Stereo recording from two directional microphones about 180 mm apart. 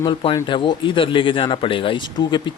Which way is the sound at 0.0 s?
30° left (ahead or behind).